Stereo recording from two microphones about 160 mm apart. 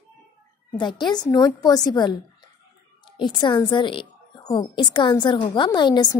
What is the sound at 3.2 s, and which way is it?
A woman's voice, 30° left (ahead or behind).